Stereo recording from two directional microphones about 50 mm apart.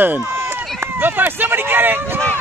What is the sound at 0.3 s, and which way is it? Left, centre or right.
Run, right.